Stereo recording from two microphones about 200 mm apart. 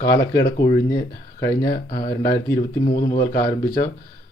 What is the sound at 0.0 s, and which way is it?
Speech, 15° left (ahead or behind).